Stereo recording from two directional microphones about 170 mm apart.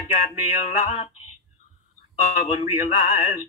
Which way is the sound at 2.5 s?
40° left (ahead or behind).